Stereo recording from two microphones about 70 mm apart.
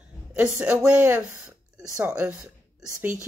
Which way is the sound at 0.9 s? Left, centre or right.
Right.